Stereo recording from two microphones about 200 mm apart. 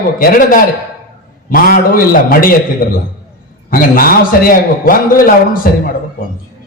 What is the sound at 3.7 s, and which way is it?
A man's voice, 45° left (ahead or behind).